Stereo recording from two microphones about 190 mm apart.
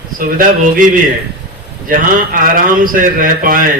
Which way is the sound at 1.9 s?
45° right (ahead or behind).